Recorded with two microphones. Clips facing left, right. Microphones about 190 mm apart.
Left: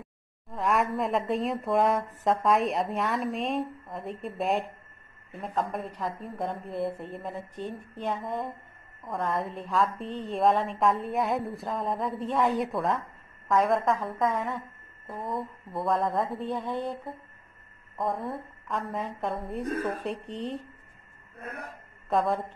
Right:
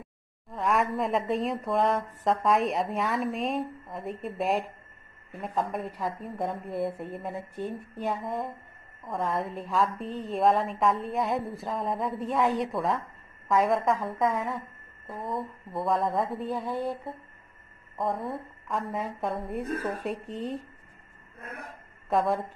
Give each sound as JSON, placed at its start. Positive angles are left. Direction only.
{"t": 0.0, "sound": "speech", "side_deg": 0}
{"t": 22.1, "sound": "speech", "side_deg": 0}